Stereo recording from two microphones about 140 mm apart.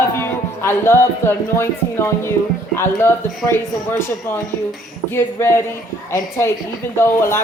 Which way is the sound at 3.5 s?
15° left (ahead or behind).